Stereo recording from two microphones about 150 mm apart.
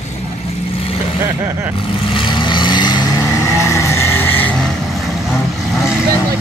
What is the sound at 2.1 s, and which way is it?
Vehicle, 30° left (ahead or behind).